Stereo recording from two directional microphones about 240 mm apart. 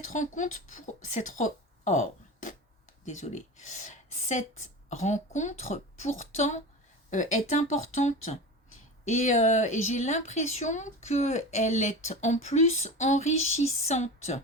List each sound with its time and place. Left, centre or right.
0.0 s speech: left